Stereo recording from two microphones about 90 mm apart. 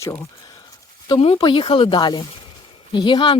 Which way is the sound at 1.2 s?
75° left (ahead or behind).